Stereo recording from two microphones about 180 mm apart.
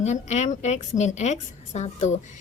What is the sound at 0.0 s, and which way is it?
A woman's voice, 40° left (ahead or behind).